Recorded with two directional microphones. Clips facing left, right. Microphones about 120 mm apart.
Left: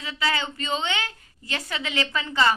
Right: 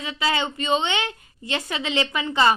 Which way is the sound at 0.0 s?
20° right (ahead or behind).